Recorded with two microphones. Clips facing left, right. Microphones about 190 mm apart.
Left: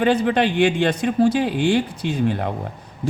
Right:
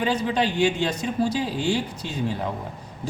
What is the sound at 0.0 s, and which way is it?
Speech, 60° left (ahead or behind).